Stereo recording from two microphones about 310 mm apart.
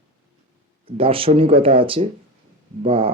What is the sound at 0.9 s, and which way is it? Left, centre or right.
Speech, centre.